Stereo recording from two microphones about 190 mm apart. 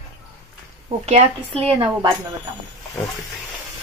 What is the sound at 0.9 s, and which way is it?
Speech, 30° right (ahead or behind).